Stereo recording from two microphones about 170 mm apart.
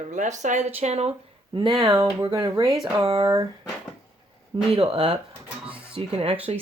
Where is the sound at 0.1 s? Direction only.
45° right (ahead or behind).